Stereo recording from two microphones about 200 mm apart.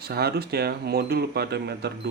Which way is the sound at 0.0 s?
50° right (ahead or behind).